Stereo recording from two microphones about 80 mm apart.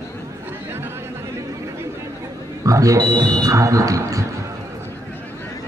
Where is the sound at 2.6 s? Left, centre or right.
Right.